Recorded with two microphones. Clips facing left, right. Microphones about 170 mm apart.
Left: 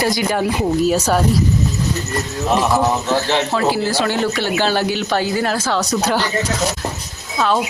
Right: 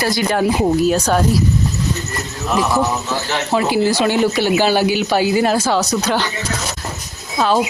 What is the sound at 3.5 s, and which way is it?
Speech, 15° right (ahead or behind).